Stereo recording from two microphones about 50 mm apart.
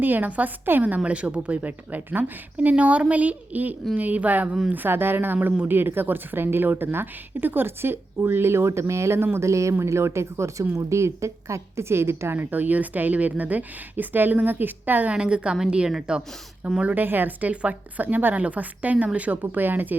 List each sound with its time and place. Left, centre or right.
0.0 s a woman's voice: right
2.6 s a woman's voice: right
9.4 s speech: right
12.5 s a woman's voice: right
15.1 s a woman's voice: right
16.8 s a woman's voice: right